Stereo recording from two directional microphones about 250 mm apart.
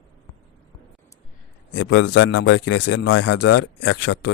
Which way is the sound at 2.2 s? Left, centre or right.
Left.